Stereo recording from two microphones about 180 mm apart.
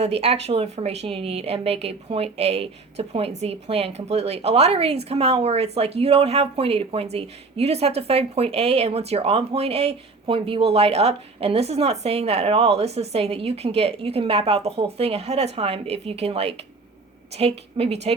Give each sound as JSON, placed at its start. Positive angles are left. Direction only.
{"t": 0.0, "sound": "a woman's voice", "side_deg": -35}